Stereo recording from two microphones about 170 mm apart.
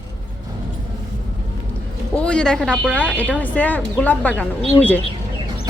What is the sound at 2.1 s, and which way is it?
Speech, 5° left (ahead or behind).